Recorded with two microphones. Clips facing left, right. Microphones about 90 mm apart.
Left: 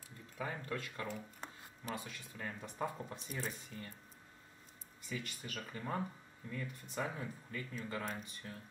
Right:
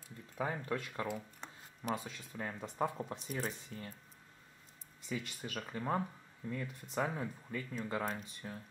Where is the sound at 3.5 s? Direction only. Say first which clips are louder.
Right 2 dB; 30° right (ahead or behind).